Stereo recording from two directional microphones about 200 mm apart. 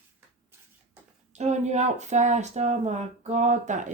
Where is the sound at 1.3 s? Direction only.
35° right (ahead or behind).